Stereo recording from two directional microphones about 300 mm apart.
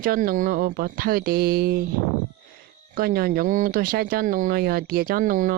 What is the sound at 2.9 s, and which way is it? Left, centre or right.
Speech, right.